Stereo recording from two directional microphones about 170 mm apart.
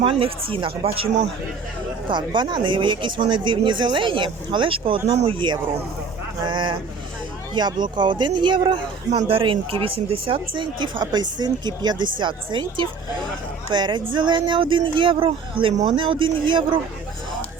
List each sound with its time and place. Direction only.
0.0 s speech: 35° right (ahead or behind)
2.0 s speech: 25° right (ahead or behind)